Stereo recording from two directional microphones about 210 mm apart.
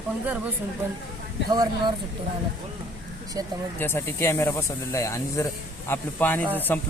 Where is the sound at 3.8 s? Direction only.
10° left (ahead or behind).